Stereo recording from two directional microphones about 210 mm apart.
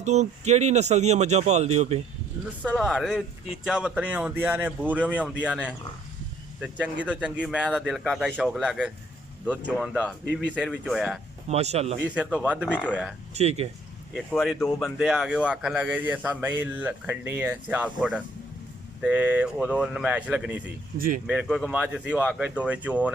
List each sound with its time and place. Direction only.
0.0 s speech: 30° right (ahead or behind)
2.6 s a man's voice: centre (ahead or behind)
6.6 s a man's voice: 5° right (ahead or behind)
11.4 s speech: 30° right (ahead or behind)
12.0 s a man's voice: 5° right (ahead or behind)
12.6 s speech: 5° left (ahead or behind)
12.9 s a man's voice: 5° right (ahead or behind)
13.3 s speech: 30° right (ahead or behind)
14.1 s a man's voice: centre (ahead or behind)